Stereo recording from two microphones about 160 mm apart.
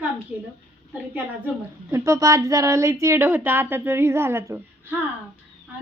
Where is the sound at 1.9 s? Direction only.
20° right (ahead or behind).